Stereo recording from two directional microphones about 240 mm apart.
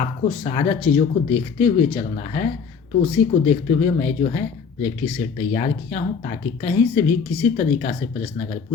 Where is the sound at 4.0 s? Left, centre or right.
Left.